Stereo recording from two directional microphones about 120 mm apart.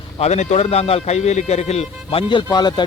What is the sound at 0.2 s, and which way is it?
A man's voice, 75° left (ahead or behind).